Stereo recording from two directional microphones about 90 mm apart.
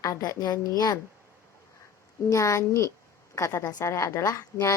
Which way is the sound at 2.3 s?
35° left (ahead or behind).